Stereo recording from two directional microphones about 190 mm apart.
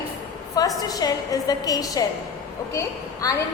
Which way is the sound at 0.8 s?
20° left (ahead or behind).